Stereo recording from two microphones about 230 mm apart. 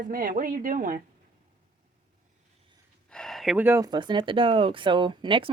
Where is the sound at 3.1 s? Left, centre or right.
Centre.